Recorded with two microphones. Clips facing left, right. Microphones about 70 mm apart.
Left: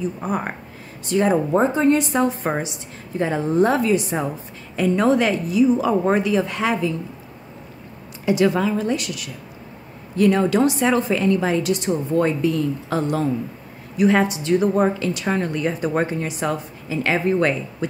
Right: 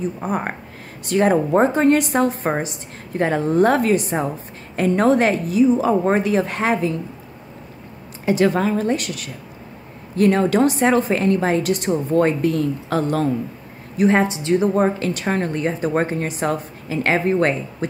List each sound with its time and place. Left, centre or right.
0.2 s a woman's voice: right
1.0 s a woman's voice: right
8.3 s a woman's voice: right
13.9 s a woman's voice: right
15.0 s a woman's voice: right